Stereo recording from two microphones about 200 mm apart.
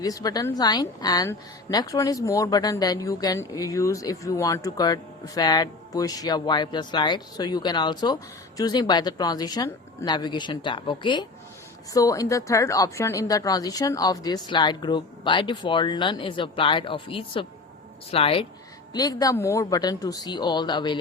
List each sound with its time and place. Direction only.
0.0 s a woman's voice: 20° left (ahead or behind)